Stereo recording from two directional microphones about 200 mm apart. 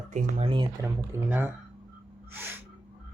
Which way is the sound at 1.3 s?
10° right (ahead or behind).